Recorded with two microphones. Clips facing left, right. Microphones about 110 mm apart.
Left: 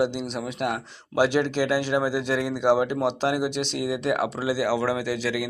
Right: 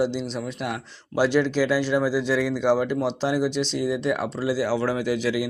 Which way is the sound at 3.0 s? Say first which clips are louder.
Right 1 dB; 55° left (ahead or behind).